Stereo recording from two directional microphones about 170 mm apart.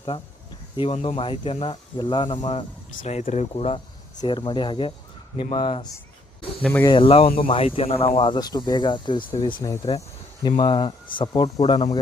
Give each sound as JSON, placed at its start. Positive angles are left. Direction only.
{"t": 0.8, "sound": "speech", "side_deg": 35}
{"t": 3.0, "sound": "speech", "side_deg": 45}
{"t": 6.6, "sound": "speech", "side_deg": 5}
{"t": 6.8, "sound": "speech", "side_deg": 30}